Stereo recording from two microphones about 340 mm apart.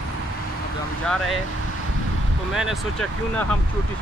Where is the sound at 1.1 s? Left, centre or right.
Centre.